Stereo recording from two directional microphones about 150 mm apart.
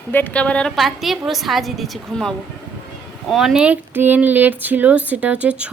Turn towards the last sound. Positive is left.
turn(degrees=-10)  # may be behind; listen again after turning